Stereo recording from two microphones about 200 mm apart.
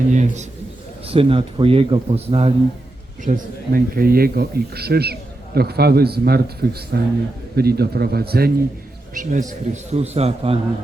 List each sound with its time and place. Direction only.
0.1 s a man's voice: 35° right (ahead or behind)
3.2 s speech: 45° right (ahead or behind)
9.1 s a man's voice: 40° right (ahead or behind)